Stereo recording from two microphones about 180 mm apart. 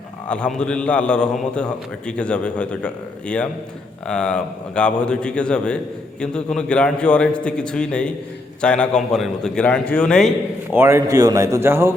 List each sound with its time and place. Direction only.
0.3 s a man's voice: 5° left (ahead or behind)
10.7 s speech: 15° right (ahead or behind)